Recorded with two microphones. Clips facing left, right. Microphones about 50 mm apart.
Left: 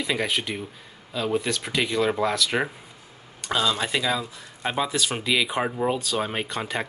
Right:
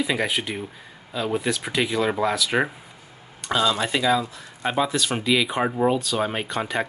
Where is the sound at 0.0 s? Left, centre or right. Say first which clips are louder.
Right 2 dB; centre.